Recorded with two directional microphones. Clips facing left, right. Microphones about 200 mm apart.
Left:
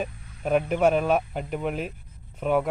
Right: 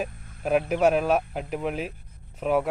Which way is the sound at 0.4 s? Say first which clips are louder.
Even; 5° right (ahead or behind).